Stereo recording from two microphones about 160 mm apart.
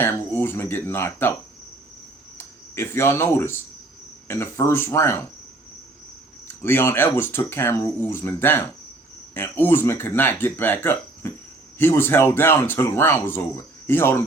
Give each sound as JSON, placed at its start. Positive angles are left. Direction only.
{"t": 0.0, "sound": "speech", "side_deg": 10}
{"t": 2.4, "sound": "speech", "side_deg": 15}
{"t": 6.5, "sound": "speech", "side_deg": 15}